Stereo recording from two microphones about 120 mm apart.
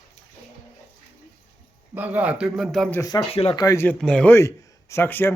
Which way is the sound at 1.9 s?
15° right (ahead or behind).